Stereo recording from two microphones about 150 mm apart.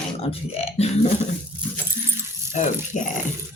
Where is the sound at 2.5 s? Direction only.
55° left (ahead or behind).